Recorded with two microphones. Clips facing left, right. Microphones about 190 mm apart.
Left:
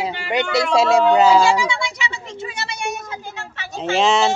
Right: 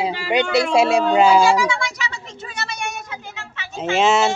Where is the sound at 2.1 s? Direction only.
30° left (ahead or behind).